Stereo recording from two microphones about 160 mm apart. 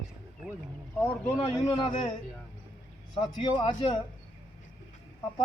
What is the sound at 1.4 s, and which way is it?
Speech, 35° left (ahead or behind).